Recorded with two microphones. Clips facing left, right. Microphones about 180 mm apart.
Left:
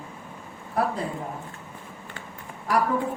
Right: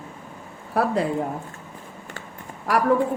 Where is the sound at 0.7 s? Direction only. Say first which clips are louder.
Right 4 dB; 75° right (ahead or behind).